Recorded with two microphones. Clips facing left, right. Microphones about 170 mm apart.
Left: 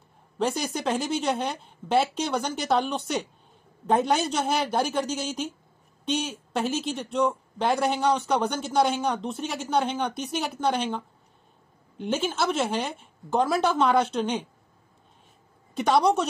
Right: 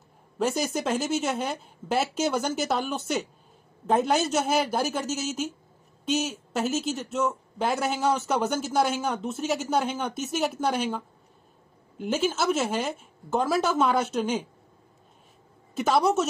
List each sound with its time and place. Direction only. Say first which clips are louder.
0.4 s speech: right 1 dB; centre (ahead or behind)
15.7 s speech: left 1 dB; centre (ahead or behind)